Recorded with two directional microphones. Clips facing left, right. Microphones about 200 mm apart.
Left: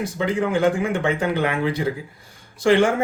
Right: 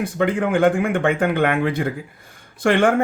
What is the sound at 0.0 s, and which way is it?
Speech, 55° right (ahead or behind).